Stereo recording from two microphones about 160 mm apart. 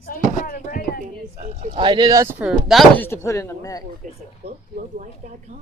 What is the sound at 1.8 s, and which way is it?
Speech, 25° right (ahead or behind).